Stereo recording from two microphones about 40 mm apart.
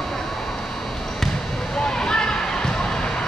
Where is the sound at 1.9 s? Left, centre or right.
Centre.